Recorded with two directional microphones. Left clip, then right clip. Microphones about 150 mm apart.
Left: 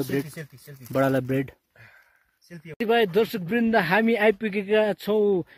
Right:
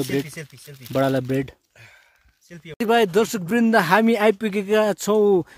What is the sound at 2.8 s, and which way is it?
Speech, 40° right (ahead or behind).